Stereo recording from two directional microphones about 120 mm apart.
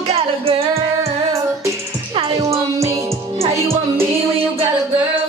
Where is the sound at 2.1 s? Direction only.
50° right (ahead or behind).